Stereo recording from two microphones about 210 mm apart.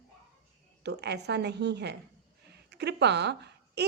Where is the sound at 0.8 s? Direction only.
55° right (ahead or behind).